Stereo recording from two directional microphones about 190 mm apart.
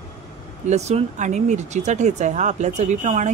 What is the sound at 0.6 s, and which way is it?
Speech, 35° right (ahead or behind).